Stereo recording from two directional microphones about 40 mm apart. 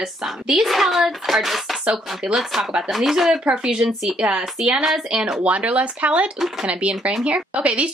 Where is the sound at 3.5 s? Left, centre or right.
Centre.